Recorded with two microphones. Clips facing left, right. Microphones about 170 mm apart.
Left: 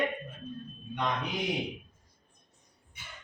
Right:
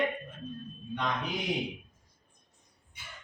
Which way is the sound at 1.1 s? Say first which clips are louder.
Left 1 dB; centre (ahead or behind).